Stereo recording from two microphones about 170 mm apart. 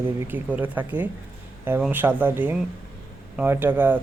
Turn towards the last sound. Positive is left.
turn(degrees=-10)  # may be behind; listen again after turning